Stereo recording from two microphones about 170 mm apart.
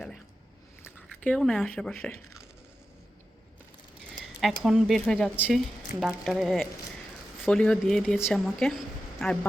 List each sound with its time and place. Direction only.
0.8 s a sound: 10° left (ahead or behind)
1.0 s speech: 5° left (ahead or behind)
4.6 s speech: centre (ahead or behind)